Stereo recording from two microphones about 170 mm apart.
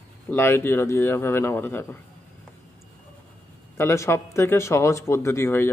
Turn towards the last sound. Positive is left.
turn(degrees=15)  # may be behind; listen again after turning